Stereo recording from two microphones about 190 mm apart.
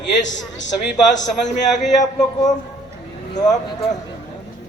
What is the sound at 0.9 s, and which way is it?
A man's voice, 40° left (ahead or behind).